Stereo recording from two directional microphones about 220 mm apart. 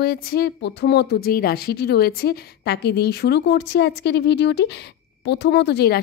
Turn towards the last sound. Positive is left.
turn(degrees=45)  # may be behind; listen again after turning